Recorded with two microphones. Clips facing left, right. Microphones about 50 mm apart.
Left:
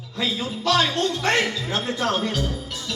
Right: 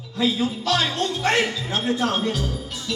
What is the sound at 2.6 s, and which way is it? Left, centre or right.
Music, right.